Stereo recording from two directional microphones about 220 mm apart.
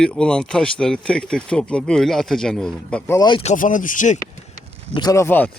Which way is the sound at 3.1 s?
20° left (ahead or behind).